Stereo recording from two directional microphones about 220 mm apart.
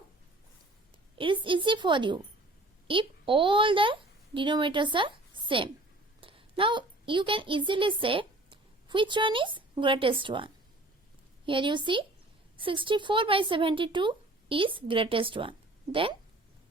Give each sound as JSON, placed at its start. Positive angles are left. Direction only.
{"t": 1.2, "sound": "a woman's voice", "side_deg": -25}